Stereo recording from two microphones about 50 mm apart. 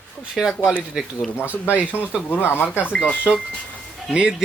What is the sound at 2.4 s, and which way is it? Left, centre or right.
Speech, left.